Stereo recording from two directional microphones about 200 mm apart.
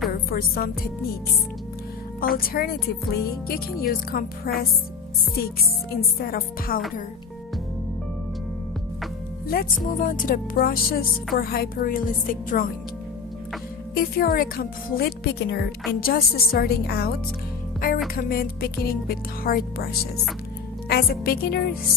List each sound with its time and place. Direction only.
0.3 s speech: 45° left (ahead or behind)
2.4 s speech: 50° left (ahead or behind)
9.5 s speech: 45° left (ahead or behind)
13.9 s speech: 45° left (ahead or behind)
17.7 s music: 45° left (ahead or behind)
18.1 s speech: 45° left (ahead or behind)